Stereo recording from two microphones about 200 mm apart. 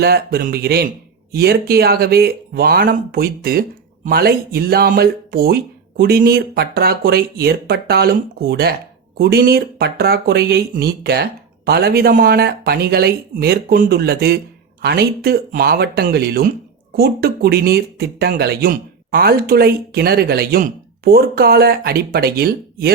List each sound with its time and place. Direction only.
0.0 s speech: 50° right (ahead or behind)